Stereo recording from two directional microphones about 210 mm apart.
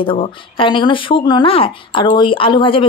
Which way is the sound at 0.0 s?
25° left (ahead or behind).